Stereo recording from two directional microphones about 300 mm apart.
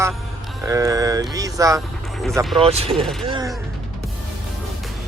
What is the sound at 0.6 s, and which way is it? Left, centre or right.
Speech, centre.